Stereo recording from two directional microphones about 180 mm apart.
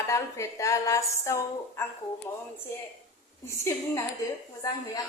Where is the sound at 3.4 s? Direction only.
15° left (ahead or behind).